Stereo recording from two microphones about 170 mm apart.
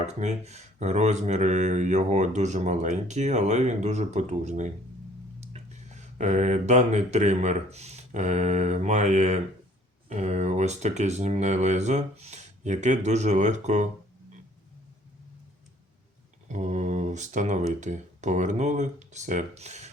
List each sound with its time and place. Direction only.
0.0 s speech: 40° right (ahead or behind)
16.5 s speech: 45° right (ahead or behind)